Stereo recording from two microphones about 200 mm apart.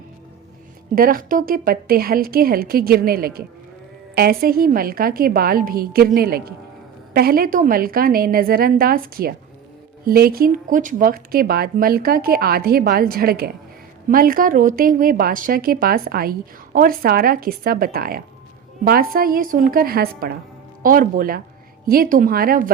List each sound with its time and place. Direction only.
0.9 s speech: 45° right (ahead or behind)